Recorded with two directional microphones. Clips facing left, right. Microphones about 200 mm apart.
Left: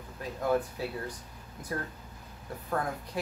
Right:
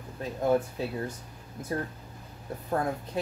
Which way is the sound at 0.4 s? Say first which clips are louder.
Right 3 dB; 25° right (ahead or behind).